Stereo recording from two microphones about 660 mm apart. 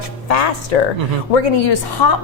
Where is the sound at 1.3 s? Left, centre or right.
Left.